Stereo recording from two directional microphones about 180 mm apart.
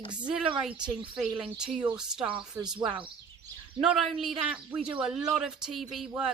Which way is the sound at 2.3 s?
25° right (ahead or behind).